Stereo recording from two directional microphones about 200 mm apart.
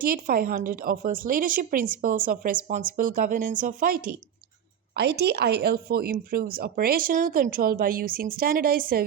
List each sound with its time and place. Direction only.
0.0 s speech: 45° right (ahead or behind)
4.9 s speech: 55° right (ahead or behind)